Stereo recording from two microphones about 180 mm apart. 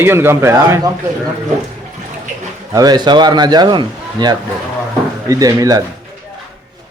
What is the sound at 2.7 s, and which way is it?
Speech, 20° right (ahead or behind).